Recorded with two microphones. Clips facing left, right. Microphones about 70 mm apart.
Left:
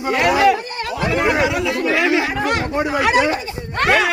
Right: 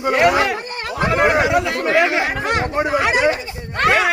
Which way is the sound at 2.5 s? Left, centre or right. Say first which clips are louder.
Right 1 dB; centre.